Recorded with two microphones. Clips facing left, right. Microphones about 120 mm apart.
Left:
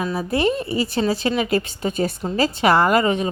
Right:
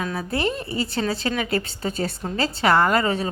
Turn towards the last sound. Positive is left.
turn(degrees=15)  # may be behind; listen again after turning